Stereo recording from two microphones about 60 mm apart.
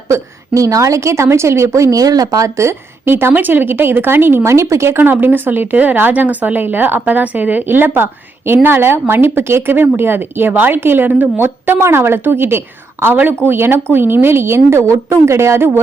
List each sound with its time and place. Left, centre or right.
0.1 s a woman's voice: right